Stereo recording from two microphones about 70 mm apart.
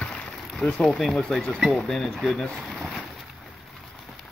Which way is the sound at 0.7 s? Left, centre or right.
Centre.